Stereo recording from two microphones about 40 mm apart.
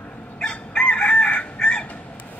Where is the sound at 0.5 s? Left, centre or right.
Left.